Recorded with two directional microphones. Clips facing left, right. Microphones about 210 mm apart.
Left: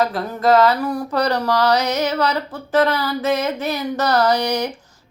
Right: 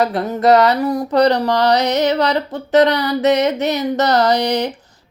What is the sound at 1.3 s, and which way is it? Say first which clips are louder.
Mantra: right 3 dB; 20° right (ahead or behind).